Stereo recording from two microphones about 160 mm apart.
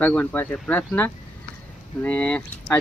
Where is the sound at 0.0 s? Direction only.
10° left (ahead or behind).